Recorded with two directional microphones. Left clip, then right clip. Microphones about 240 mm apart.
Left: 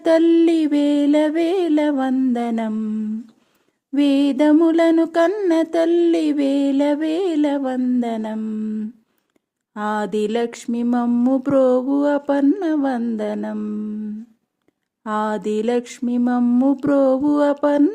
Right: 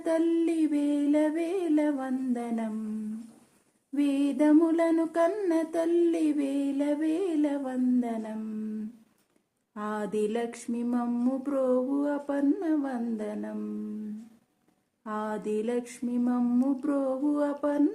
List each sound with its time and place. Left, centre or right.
0.0 s mantra: left
3.9 s mantra: left
9.7 s mantra: left
15.0 s mantra: left